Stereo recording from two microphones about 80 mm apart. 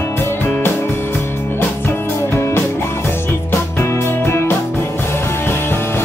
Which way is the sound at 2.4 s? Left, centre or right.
Left.